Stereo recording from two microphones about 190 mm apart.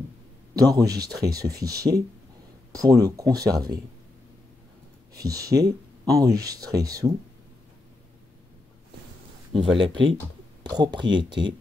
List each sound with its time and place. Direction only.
0.6 s speech: 20° right (ahead or behind)
5.1 s speech: 15° right (ahead or behind)
9.5 s speech: 30° right (ahead or behind)